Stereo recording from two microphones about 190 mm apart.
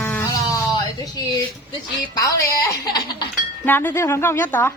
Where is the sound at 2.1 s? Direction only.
20° left (ahead or behind).